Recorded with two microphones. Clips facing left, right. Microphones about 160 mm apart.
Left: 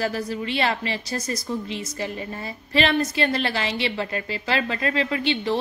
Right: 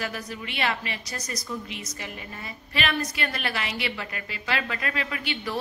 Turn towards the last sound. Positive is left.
turn(degrees=30)  # may be behind; listen again after turning